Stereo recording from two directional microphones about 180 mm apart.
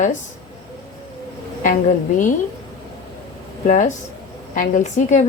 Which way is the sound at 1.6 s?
45° left (ahead or behind).